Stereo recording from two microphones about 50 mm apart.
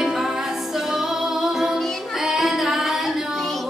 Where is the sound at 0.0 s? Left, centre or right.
Centre.